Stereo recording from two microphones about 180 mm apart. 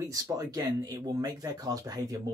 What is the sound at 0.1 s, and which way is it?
Speech, 20° right (ahead or behind).